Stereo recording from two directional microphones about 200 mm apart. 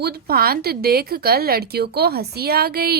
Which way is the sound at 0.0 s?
50° right (ahead or behind).